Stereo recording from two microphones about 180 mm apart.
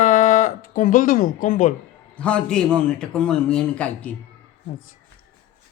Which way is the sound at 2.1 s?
5° left (ahead or behind).